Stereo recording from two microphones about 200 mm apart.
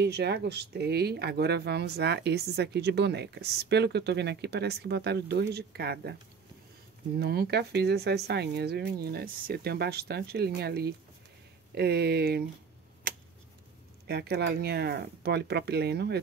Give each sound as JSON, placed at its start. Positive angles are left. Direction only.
{"t": 0.0, "sound": "speech", "side_deg": -55}
{"t": 7.2, "sound": "speech", "side_deg": -55}
{"t": 14.0, "sound": "speech", "side_deg": -55}